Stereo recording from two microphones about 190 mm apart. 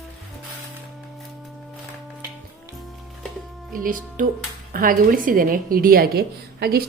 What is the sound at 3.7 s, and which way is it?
A woman's voice, 45° right (ahead or behind).